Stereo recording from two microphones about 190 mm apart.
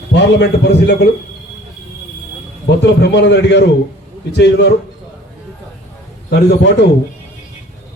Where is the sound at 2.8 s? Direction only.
65° left (ahead or behind).